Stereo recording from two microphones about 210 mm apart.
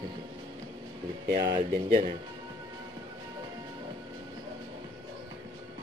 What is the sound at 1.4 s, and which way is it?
Speech, 20° right (ahead or behind).